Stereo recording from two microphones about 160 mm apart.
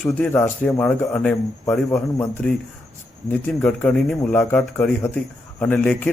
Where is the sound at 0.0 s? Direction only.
10° left (ahead or behind).